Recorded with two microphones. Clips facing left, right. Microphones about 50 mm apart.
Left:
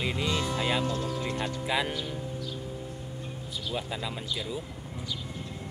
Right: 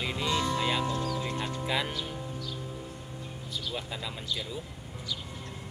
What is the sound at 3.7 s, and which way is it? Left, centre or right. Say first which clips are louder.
Speech: left 5 dB; centre.